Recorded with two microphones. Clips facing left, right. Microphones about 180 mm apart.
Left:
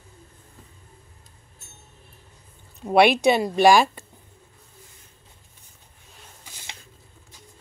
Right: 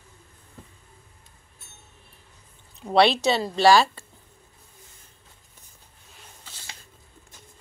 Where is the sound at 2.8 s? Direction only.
15° left (ahead or behind).